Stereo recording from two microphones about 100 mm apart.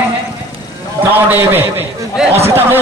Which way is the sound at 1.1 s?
20° right (ahead or behind).